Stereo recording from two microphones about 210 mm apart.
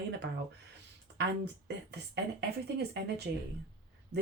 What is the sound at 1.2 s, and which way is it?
Speech, 55° right (ahead or behind).